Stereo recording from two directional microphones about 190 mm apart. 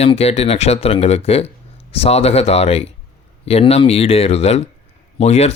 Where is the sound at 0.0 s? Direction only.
35° left (ahead or behind).